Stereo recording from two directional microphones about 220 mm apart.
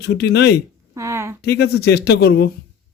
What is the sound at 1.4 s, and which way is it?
Speech, 45° left (ahead or behind).